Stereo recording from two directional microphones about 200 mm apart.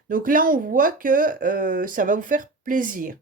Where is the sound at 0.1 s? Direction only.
45° right (ahead or behind).